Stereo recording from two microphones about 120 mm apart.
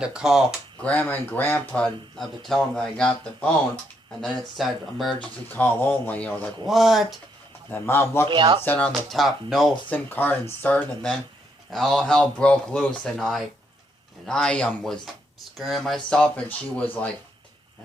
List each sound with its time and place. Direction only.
0.0 s speech: 5° right (ahead or behind)
0.8 s speech: 10° left (ahead or behind)
5.2 s speech: 15° left (ahead or behind)
6.7 s speech: centre (ahead or behind)
7.7 s speech: 20° left (ahead or behind)
8.3 s speech: 45° right (ahead or behind)
8.6 s speech: 15° left (ahead or behind)
8.9 s speech: centre (ahead or behind)
9.9 s speech: 15° left (ahead or behind)